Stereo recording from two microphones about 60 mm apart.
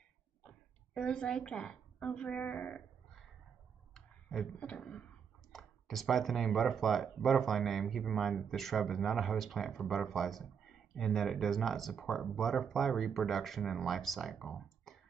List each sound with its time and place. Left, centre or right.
0.9 s a woman's voice: centre
3.9 s clicking: centre
4.6 s a woman's voice: centre
5.5 s speech: centre